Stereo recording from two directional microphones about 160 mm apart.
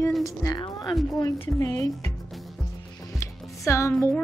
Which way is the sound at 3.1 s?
20° left (ahead or behind).